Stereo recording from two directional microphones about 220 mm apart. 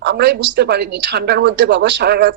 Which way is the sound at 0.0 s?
55° right (ahead or behind).